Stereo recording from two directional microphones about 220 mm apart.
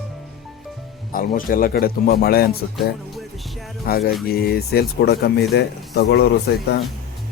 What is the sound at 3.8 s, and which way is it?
Speech, 45° left (ahead or behind).